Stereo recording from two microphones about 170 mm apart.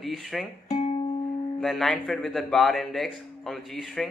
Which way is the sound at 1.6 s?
Centre (ahead or behind).